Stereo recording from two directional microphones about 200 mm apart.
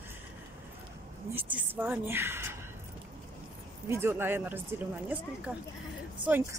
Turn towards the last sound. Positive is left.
turn(degrees=-10)  # may be behind; listen again after turning